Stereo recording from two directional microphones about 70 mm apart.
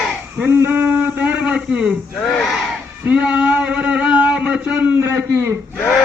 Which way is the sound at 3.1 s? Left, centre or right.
Centre.